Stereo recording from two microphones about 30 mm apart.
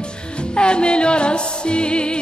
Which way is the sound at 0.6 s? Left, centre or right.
Left.